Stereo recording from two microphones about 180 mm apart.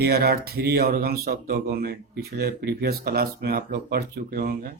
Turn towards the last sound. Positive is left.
turn(degrees=-55)  # may be behind; listen again after turning